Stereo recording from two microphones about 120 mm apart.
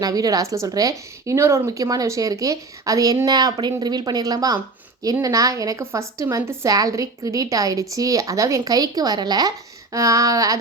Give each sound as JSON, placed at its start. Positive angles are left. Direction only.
{"t": 0.0, "sound": "a woman's voice", "side_deg": -30}